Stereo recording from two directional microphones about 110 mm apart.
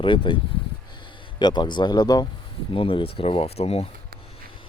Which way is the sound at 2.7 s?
55° left (ahead or behind).